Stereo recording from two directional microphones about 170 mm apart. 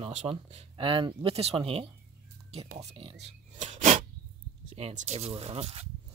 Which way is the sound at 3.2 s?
35° right (ahead or behind).